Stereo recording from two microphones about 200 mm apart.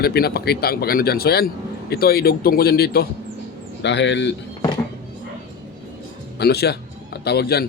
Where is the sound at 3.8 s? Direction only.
60° left (ahead or behind).